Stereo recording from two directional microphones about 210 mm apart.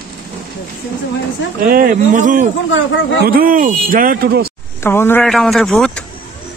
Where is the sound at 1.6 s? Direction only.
40° right (ahead or behind).